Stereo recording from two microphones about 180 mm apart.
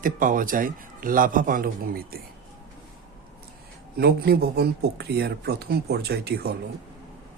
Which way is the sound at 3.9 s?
65° right (ahead or behind).